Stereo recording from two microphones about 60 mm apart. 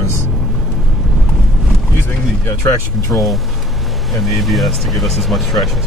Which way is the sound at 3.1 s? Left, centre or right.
Centre.